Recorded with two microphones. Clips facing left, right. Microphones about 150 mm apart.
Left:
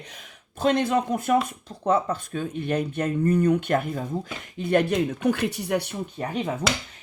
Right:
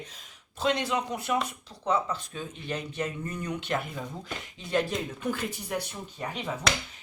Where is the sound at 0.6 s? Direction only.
50° left (ahead or behind); by 6.0 s 65° left (ahead or behind).